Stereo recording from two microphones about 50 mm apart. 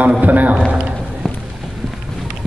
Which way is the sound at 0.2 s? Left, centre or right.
Right.